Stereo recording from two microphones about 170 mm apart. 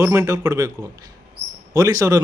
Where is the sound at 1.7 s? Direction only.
20° right (ahead or behind).